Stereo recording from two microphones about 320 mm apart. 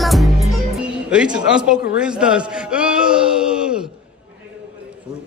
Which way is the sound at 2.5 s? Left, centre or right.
Centre.